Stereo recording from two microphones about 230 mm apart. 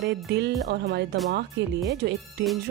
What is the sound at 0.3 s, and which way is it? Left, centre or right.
Speech, right.